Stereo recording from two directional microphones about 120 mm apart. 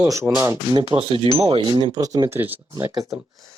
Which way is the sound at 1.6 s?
35° right (ahead or behind).